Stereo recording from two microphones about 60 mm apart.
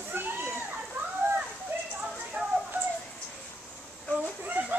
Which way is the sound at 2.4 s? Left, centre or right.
Right.